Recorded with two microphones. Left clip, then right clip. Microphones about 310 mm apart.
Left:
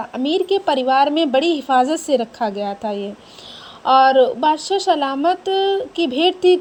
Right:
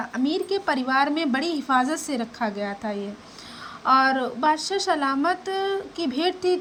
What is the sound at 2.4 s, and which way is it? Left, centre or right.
Speech, left.